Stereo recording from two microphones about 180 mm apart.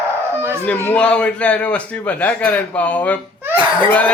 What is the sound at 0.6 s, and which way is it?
A man's voice, 10° left (ahead or behind).